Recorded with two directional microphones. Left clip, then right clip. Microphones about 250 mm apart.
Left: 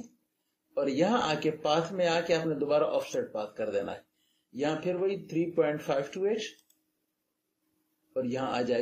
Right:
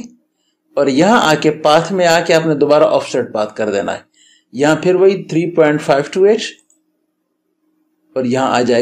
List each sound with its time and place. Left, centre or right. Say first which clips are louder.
0.7 s speech: right 16 dB; right
8.1 s speech: right 17 dB; right